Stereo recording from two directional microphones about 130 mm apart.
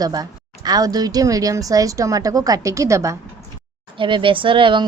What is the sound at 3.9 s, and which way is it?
Speech, 40° right (ahead or behind).